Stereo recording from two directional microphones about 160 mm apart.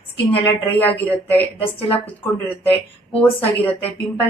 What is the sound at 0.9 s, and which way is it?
Speech, 10° left (ahead or behind).